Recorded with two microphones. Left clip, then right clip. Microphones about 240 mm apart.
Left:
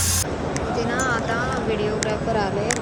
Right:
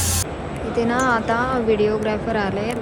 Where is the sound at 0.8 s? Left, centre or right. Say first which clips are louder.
Right 6 dB; centre.